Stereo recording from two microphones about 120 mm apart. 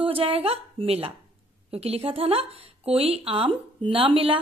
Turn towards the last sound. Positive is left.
turn(degrees=-50)  # may be behind; listen again after turning